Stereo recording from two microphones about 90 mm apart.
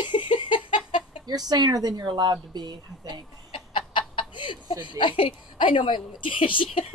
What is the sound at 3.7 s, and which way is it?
Chicken, 65° left (ahead or behind).